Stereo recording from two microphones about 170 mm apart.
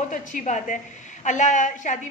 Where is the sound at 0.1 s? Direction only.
45° left (ahead or behind).